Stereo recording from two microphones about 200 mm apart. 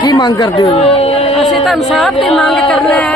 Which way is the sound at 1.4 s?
Centre (ahead or behind).